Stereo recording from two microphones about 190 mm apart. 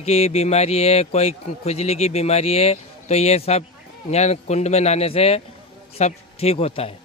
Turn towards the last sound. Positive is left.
turn(degrees=30)  # may be behind; listen again after turning